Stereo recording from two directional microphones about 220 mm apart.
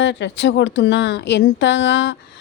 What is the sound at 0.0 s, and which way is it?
Speech, 55° left (ahead or behind).